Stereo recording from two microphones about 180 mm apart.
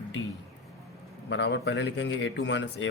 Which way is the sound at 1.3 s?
80° left.